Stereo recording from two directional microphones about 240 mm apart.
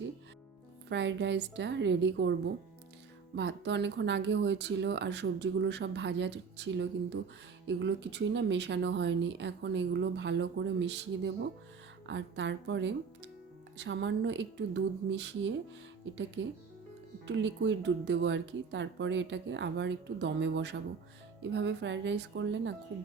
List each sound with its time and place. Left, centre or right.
0.9 s speech: right
3.3 s speech: right
17.2 s speech: right